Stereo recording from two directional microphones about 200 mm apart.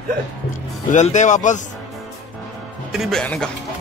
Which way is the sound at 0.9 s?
35° left (ahead or behind).